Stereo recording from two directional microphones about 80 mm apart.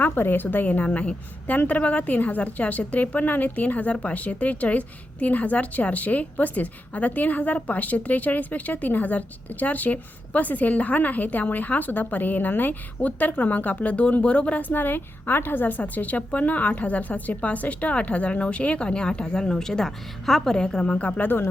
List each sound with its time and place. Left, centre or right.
0.0 s a woman's voice: left